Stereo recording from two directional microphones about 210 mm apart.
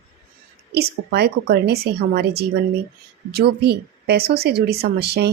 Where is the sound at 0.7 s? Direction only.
50° right (ahead or behind).